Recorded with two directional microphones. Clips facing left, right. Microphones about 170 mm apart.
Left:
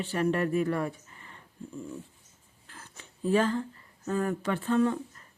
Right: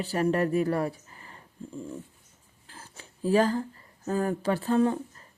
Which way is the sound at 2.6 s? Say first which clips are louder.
Right 2 dB; 30° right (ahead or behind).